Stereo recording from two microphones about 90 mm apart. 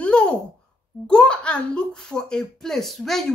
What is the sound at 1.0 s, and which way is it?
Speech, 10° left (ahead or behind).